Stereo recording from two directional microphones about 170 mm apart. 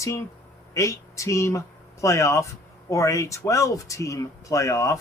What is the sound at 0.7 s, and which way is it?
Speech, 15° left (ahead or behind).